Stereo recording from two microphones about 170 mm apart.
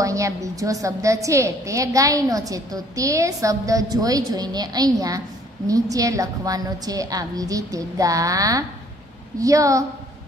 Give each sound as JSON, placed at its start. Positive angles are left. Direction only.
{"t": 0.0, "sound": "a woman's voice", "side_deg": -20}